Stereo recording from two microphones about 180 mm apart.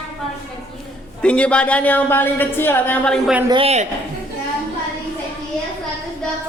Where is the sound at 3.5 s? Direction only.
35° right (ahead or behind).